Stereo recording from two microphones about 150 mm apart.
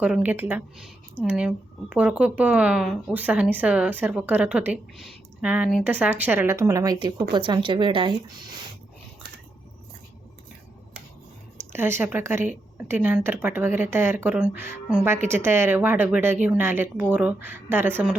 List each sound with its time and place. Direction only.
0.0 s a woman's voice: 10° right (ahead or behind); by 8.4 s 30° right (ahead or behind)
11.7 s a woman's voice: 15° right (ahead or behind)